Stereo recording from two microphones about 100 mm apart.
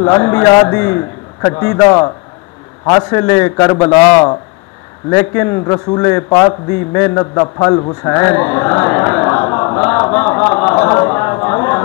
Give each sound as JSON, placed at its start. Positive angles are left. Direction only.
{"t": 0.0, "sound": "a man's voice", "side_deg": 25}
{"t": 0.5, "sound": "a man's voice", "side_deg": 35}
{"t": 0.7, "sound": "a man's voice", "side_deg": 20}
{"t": 3.1, "sound": "a man's voice", "side_deg": 25}
{"t": 5.1, "sound": "a man's voice", "side_deg": 25}
{"t": 5.6, "sound": "a man's voice", "side_deg": 40}
{"t": 5.9, "sound": "a man's voice", "side_deg": 25}
{"t": 10.1, "sound": "a sound", "side_deg": 20}